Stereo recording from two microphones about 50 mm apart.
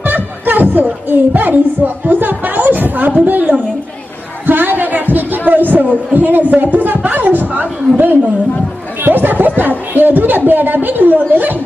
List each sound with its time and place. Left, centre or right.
0.0 s music: right
1.3 s speech: right
4.4 s a sound: right
5.7 s speech: right
9.0 s chatter: right
9.6 s speech: right